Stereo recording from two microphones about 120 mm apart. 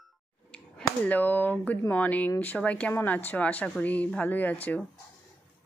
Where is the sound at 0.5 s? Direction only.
10° left (ahead or behind).